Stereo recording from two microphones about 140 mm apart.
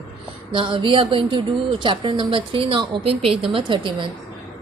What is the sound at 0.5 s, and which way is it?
Speech, 35° right (ahead or behind).